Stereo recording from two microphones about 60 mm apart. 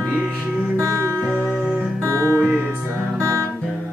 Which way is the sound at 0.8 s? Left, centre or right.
Right.